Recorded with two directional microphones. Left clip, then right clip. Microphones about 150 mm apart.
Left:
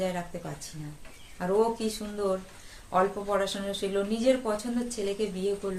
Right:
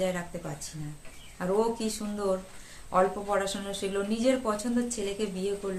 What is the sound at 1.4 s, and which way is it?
Speech, 20° right (ahead or behind).